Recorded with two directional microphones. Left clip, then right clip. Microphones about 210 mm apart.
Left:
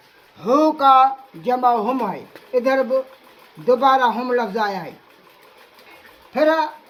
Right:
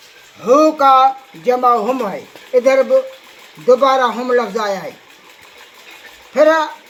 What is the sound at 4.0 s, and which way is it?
Speech, 25° left (ahead or behind).